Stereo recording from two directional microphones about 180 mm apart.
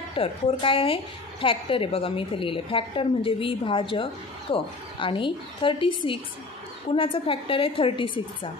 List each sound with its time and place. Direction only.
0.1 s a woman's voice: 30° left (ahead or behind)